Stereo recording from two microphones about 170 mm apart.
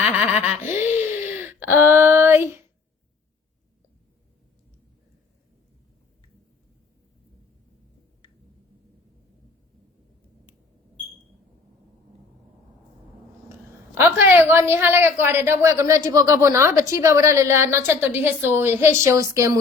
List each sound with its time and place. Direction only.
0.0 s giggle: 10° right (ahead or behind)
13.5 s a woman's voice: 15° right (ahead or behind)